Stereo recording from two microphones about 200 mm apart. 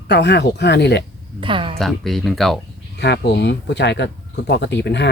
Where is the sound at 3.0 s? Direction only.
55° left (ahead or behind).